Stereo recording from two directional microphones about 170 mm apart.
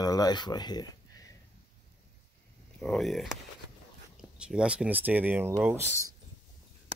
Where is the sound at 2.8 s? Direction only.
Centre (ahead or behind).